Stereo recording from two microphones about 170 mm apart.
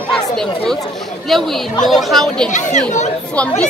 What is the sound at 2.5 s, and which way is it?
Speech, 45° left (ahead or behind).